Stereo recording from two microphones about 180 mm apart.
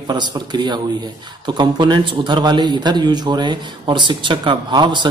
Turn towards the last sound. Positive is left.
turn(degrees=-25)  # may be behind; listen again after turning